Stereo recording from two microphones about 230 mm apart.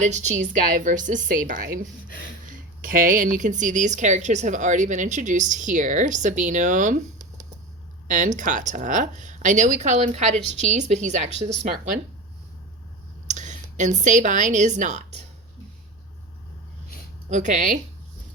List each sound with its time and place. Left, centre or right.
0.0 s a woman's voice: right
8.0 s a woman's voice: right
13.2 s a woman's voice: right
17.2 s a woman's voice: right